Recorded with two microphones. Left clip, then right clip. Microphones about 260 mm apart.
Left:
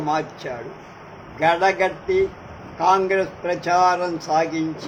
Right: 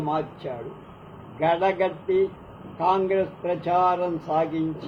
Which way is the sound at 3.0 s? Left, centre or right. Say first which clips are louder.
Left 3 dB; left.